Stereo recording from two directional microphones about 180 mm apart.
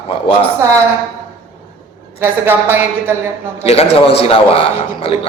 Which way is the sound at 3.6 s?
35° left (ahead or behind).